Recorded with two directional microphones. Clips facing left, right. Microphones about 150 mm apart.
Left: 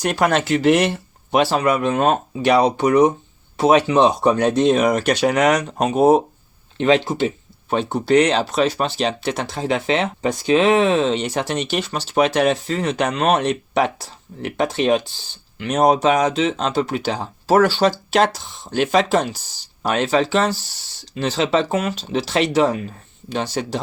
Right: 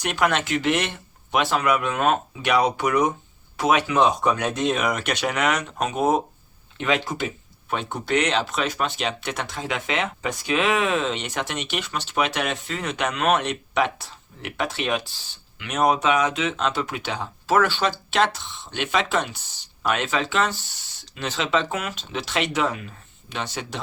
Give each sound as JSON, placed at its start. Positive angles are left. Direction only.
{"t": 0.0, "sound": "speech", "side_deg": 35}